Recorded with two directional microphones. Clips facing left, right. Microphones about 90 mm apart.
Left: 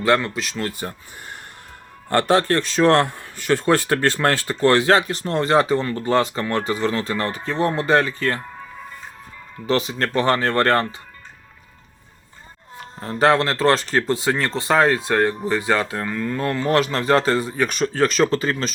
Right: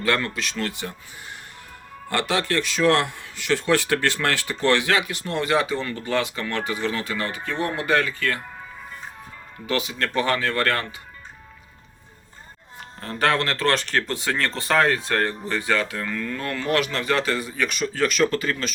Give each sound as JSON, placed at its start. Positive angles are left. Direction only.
{"t": 0.0, "sound": "speech", "side_deg": 25}
{"t": 0.8, "sound": "speech", "side_deg": 40}
{"t": 9.6, "sound": "speech", "side_deg": 35}
{"t": 13.0, "sound": "speech", "side_deg": 25}
{"t": 14.7, "sound": "speech", "side_deg": 15}
{"t": 15.7, "sound": "speech", "side_deg": 30}